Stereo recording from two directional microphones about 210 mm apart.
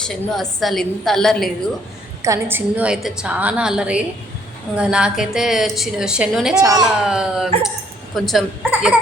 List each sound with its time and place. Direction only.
0.0 s a woman's voice: centre (ahead or behind)
2.2 s a woman's voice: 10° right (ahead or behind)
6.6 s a woman's voice: 15° right (ahead or behind)
6.8 s a woman's voice: 5° right (ahead or behind)